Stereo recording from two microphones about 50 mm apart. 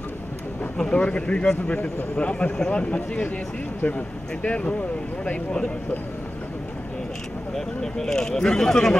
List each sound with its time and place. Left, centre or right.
0.7 s speech: left
7.5 s speech: centre